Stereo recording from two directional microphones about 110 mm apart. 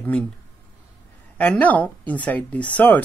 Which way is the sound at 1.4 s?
15° left (ahead or behind).